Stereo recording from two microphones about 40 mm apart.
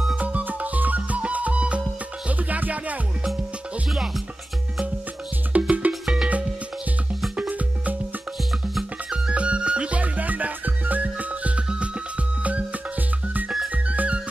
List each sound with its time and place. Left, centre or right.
0.2 s music: right
5.5 s music: right
7.3 s music: right
9.3 s music: right
13.8 s music: right